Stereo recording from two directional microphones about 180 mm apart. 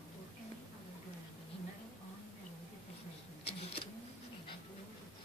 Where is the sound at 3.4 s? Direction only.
30° left (ahead or behind).